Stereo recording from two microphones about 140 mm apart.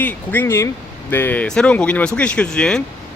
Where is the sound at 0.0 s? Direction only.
10° left (ahead or behind).